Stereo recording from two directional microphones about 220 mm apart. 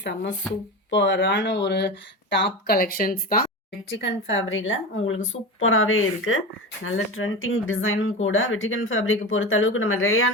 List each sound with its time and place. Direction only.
0.0 s speech: 50° left (ahead or behind)
3.8 s speech: 55° left (ahead or behind)